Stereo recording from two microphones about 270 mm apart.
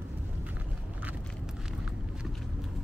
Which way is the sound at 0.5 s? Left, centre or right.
Centre.